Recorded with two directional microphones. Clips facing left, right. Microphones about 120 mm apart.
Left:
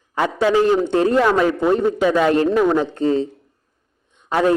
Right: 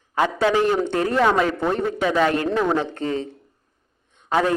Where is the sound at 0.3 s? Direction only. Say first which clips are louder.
Left 5 dB; 15° left (ahead or behind).